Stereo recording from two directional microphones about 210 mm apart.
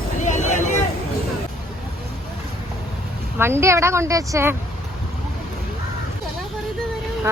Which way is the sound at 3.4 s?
10° right (ahead or behind).